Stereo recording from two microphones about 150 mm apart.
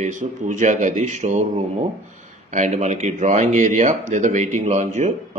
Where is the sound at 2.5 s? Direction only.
50° right (ahead or behind).